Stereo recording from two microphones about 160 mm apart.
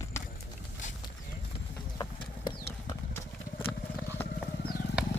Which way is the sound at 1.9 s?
25° left (ahead or behind).